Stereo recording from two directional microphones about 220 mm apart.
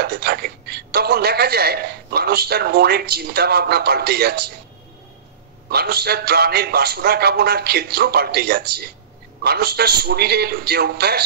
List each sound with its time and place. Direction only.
0.0 s a woman's voice: 45° right (ahead or behind)
5.7 s a man's voice: 45° right (ahead or behind)